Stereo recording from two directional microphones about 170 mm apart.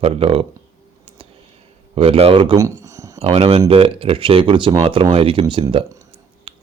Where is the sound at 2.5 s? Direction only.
20° right (ahead or behind).